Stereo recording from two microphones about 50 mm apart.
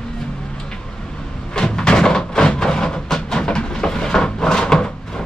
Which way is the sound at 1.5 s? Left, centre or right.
Centre.